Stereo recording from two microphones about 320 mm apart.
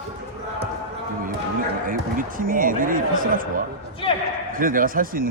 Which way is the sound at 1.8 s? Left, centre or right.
Right.